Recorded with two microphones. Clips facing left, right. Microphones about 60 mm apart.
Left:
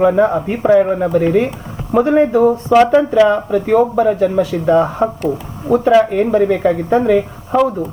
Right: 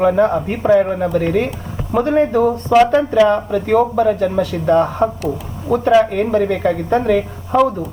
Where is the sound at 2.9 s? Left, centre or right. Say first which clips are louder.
Left 2 dB; left.